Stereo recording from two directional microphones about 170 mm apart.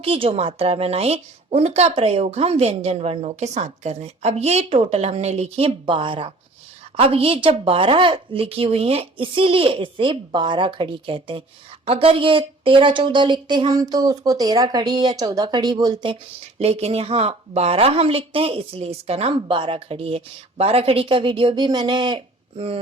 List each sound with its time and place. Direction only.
0.0 s a woman's voice: 35° right (ahead or behind)
16.6 s a woman's voice: 35° right (ahead or behind)